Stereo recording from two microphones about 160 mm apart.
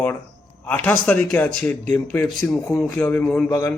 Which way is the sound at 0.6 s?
10° left (ahead or behind).